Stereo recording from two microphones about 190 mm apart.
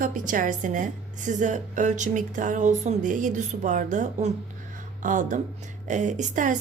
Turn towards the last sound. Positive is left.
turn(degrees=-40)  # may be behind; listen again after turning